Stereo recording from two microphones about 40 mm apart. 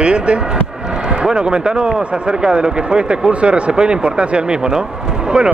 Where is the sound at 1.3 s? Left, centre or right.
Centre.